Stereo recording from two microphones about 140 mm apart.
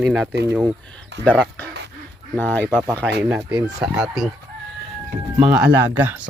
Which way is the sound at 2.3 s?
10° left (ahead or behind).